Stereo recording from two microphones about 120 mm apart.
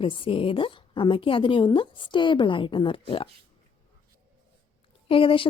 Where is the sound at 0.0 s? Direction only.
45° left (ahead or behind).